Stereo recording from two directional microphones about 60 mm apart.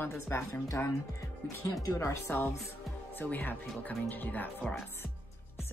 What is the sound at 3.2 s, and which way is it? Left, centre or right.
A woman's voice, left.